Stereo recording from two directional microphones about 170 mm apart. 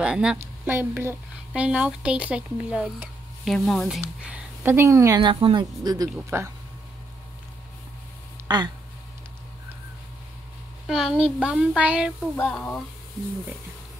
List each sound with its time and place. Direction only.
0.0 s a woman's voice: 5° right (ahead or behind)
4.2 s a woman's voice: 10° right (ahead or behind)
5.2 s speech: 30° right (ahead or behind)
6.3 s speech: 15° right (ahead or behind)
8.5 s speech: 25° right (ahead or behind)
10.9 s speech: 5° right (ahead or behind)
12.4 s speech: 5° left (ahead or behind)